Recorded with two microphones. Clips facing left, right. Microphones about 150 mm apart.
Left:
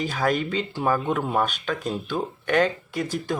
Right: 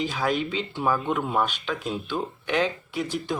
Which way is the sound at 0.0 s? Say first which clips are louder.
Left 2 dB; 45° left (ahead or behind).